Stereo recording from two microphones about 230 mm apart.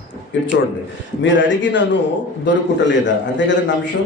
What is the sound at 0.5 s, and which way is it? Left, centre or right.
A man's voice, left.